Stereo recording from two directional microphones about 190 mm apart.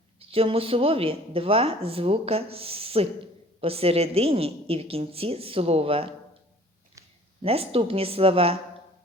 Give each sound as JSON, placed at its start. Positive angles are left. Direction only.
{"t": 0.2, "sound": "a woman's voice", "side_deg": -30}
{"t": 7.4, "sound": "speech", "side_deg": -30}